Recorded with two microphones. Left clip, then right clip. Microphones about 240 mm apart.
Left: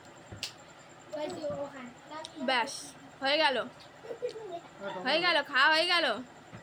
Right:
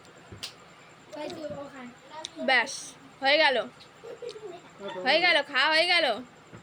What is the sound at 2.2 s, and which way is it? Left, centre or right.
A woman's voice, centre.